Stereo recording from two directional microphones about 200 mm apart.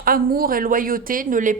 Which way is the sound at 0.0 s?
45° right (ahead or behind).